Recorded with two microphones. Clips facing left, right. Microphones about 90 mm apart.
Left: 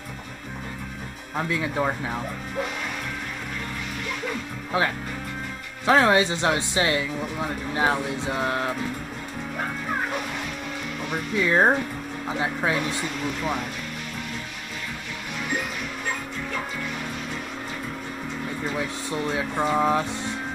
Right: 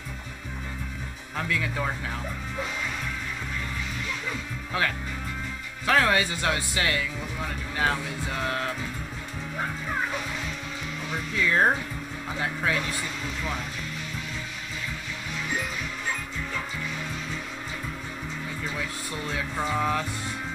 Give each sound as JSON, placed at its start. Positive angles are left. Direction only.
{"t": 1.3, "sound": "speech", "side_deg": 20}
{"t": 5.9, "sound": "speech", "side_deg": 25}
{"t": 11.3, "sound": "speech", "side_deg": 20}
{"t": 18.8, "sound": "speech", "side_deg": 20}